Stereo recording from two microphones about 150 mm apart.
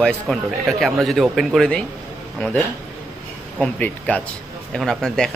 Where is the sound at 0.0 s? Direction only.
5° left (ahead or behind).